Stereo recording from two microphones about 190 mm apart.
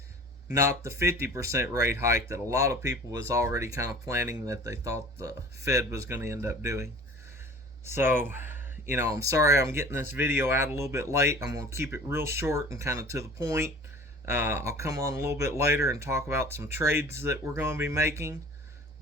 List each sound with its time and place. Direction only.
0.5 s speech: 15° right (ahead or behind)
7.9 s speech: 10° right (ahead or behind)